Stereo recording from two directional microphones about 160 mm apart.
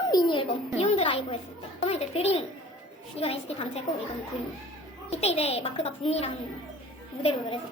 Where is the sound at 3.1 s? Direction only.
40° left (ahead or behind).